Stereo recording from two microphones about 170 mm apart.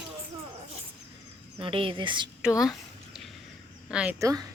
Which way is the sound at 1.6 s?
30° right (ahead or behind).